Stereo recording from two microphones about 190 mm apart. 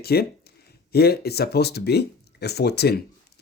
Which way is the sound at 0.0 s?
55° left (ahead or behind).